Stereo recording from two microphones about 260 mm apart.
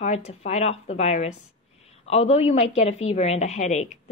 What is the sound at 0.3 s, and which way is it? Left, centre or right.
A woman's voice, left.